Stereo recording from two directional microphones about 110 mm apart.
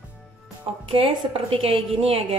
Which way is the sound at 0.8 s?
55° right (ahead or behind).